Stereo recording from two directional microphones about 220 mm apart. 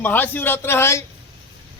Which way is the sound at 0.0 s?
10° left (ahead or behind).